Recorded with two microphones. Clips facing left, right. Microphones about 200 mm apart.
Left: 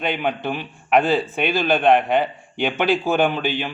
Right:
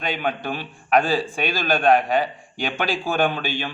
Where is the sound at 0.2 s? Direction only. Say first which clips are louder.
Left 2 dB; 15° left (ahead or behind).